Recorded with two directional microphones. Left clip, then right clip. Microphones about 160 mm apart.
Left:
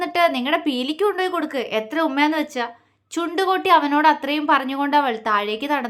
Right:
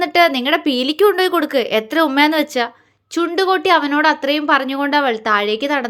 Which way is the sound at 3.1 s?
15° right (ahead or behind).